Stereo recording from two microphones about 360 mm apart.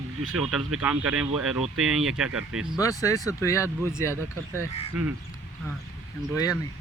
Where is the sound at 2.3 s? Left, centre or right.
Right.